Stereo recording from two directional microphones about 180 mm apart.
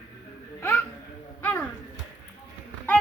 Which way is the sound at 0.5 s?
15° left (ahead or behind).